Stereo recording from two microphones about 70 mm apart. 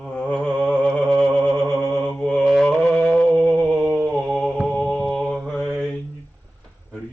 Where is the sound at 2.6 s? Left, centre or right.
Centre.